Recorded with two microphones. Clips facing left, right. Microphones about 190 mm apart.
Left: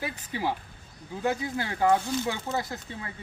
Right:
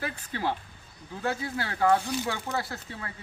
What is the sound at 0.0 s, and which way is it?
Speech, 10° left (ahead or behind).